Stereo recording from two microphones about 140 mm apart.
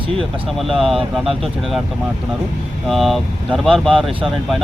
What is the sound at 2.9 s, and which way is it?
Speech, centre (ahead or behind).